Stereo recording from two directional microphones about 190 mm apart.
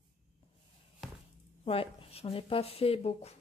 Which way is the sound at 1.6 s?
30° left (ahead or behind).